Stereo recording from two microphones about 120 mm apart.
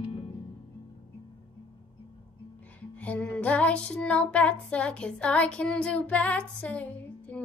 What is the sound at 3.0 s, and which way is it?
Music, 10° left (ahead or behind).